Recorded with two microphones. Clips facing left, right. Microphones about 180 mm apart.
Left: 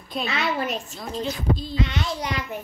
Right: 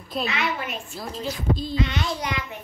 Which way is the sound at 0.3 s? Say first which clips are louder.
Left 2 dB; 35° left (ahead or behind).